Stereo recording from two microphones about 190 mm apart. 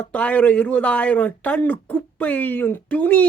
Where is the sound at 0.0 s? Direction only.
5° left (ahead or behind).